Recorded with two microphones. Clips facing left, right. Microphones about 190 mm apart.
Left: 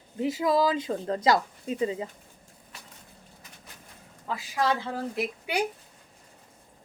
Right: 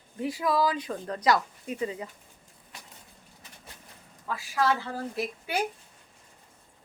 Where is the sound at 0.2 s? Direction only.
20° left (ahead or behind).